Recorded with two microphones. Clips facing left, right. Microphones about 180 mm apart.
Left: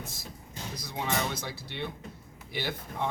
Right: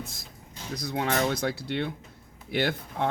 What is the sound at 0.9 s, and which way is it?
Speech, 55° right (ahead or behind).